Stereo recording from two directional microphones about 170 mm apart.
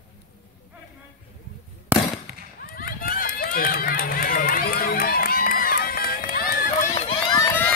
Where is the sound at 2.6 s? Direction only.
60° left (ahead or behind).